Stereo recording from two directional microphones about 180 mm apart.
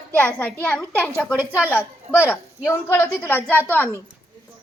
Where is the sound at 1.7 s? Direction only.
10° left (ahead or behind).